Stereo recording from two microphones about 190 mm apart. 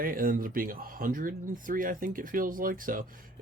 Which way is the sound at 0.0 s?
50° right (ahead or behind).